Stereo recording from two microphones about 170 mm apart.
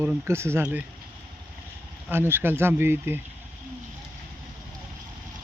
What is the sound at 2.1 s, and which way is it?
Speech, 10° right (ahead or behind).